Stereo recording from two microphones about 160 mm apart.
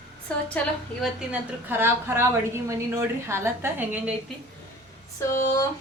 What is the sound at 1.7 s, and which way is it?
A woman's voice, 15° right (ahead or behind).